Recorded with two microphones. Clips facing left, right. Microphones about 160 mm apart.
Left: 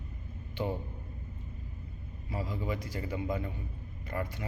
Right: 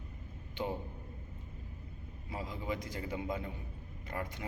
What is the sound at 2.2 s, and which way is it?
A man's voice, 20° right (ahead or behind).